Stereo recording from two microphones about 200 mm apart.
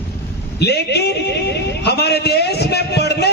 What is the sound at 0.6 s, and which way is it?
A man's voice, 55° left (ahead or behind).